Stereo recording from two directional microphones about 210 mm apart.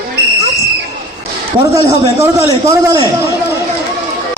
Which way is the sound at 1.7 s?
15° right (ahead or behind).